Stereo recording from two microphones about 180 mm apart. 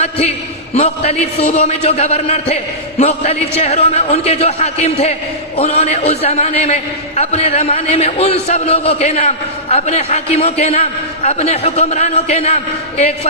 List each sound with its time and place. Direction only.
0.7 s a man's voice: 35° left (ahead or behind)